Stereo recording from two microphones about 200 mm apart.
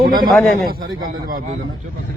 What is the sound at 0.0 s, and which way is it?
A man's voice, 45° right (ahead or behind).